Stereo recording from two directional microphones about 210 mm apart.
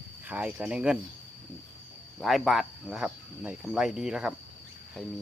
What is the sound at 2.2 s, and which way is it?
Speech, centre (ahead or behind).